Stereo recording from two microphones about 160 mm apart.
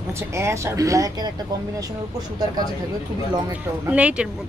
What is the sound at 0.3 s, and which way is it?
A woman's voice, 15° right (ahead or behind).